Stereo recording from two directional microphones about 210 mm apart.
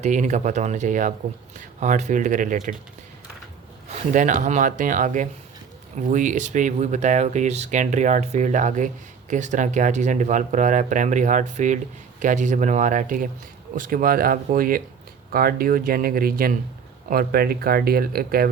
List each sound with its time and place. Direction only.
0.0 s speech: 35° right (ahead or behind)
4.1 s speech: 35° right (ahead or behind)